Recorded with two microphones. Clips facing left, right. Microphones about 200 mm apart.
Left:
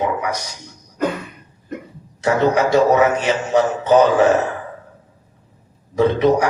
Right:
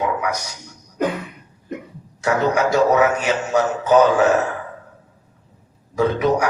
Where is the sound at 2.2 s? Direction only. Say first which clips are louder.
Left 2 dB; 30° left (ahead or behind).